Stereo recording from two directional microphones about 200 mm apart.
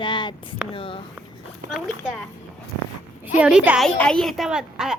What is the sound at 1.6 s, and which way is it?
Speech, 40° right (ahead or behind).